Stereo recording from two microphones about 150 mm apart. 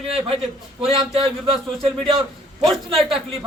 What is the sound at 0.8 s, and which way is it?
Speech, 40° right (ahead or behind).